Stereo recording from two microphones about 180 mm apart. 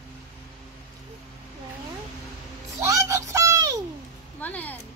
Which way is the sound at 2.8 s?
15° right (ahead or behind).